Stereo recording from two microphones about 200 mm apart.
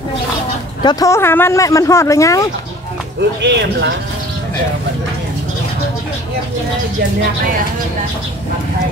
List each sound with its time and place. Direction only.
0.8 s speech: 15° left (ahead or behind)
3.4 s speech: 60° right (ahead or behind)